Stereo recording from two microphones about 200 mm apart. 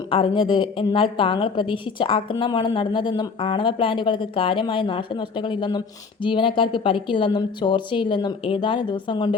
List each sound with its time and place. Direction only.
0.1 s a woman's voice: 25° left (ahead or behind)